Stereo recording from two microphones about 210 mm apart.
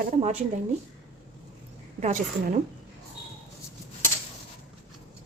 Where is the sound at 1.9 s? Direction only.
35° right (ahead or behind).